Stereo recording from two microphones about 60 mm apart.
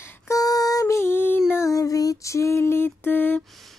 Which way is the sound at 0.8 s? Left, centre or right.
Left.